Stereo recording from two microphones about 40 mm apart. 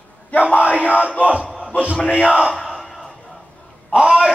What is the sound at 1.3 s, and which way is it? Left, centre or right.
Music, right.